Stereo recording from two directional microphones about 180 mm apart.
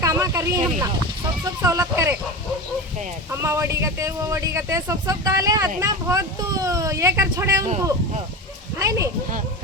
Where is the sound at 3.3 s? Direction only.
15° right (ahead or behind).